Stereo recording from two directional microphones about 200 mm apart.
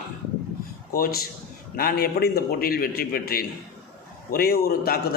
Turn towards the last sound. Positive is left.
turn(degrees=50)  # may be behind; listen again after turning